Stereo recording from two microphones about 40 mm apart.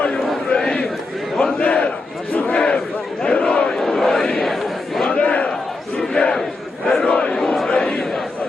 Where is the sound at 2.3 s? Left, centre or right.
Left.